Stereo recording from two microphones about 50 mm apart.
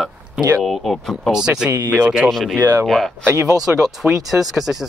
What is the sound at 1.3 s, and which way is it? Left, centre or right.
Speech, centre.